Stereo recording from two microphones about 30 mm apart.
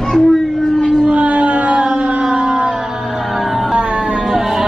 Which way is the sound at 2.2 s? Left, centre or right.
Right.